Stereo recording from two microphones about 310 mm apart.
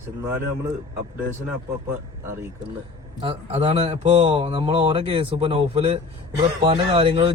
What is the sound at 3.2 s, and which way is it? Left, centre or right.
Speech, centre.